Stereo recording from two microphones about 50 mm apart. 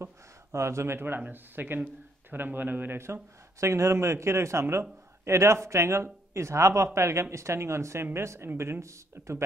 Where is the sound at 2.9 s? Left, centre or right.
Right.